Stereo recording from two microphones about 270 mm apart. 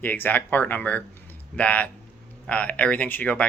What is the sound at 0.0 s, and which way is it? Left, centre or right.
Speech, centre.